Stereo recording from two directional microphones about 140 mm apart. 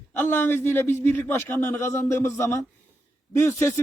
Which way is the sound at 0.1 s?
15° left (ahead or behind).